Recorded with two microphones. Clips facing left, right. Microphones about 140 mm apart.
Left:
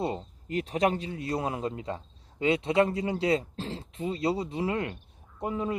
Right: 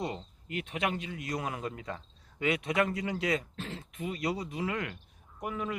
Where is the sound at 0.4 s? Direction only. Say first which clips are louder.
Left 7 dB; 35° left (ahead or behind).